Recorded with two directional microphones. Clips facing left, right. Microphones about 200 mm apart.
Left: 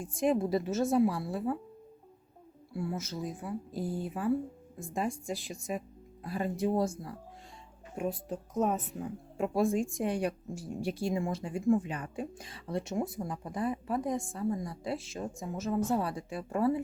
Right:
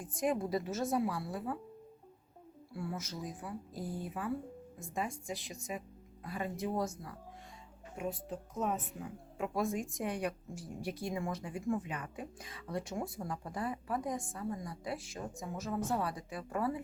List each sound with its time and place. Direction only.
0.0 s speech: 25° left (ahead or behind)
2.7 s speech: 25° left (ahead or behind)
6.2 s speech: 30° left (ahead or behind)
7.9 s speech: 45° left (ahead or behind)